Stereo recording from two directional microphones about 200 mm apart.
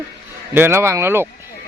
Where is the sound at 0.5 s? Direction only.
10° right (ahead or behind).